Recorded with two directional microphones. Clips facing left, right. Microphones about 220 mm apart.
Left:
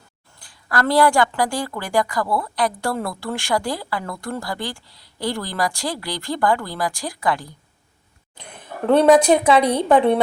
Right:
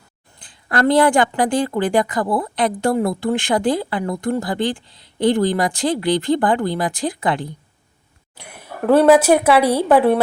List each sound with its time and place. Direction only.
0.3 s a woman's voice: 20° right (ahead or behind)
8.4 s a woman's voice: 10° right (ahead or behind)